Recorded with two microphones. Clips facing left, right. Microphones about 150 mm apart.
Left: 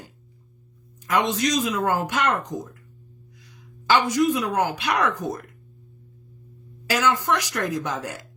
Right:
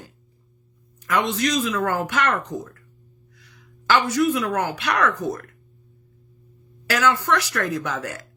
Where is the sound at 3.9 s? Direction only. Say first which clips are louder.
Even; 15° left (ahead or behind).